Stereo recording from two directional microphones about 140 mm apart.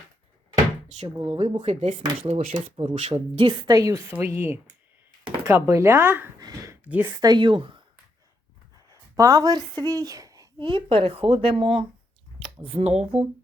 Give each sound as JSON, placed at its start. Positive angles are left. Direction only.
{"t": 1.0, "sound": "speech", "side_deg": -30}
{"t": 1.4, "sound": "speech", "side_deg": -40}
{"t": 3.7, "sound": "a woman's voice", "side_deg": -25}
{"t": 7.2, "sound": "speech", "side_deg": -30}
{"t": 8.9, "sound": "a sound", "side_deg": -25}
{"t": 9.8, "sound": "speech", "side_deg": -25}
{"t": 10.6, "sound": "speech", "side_deg": -35}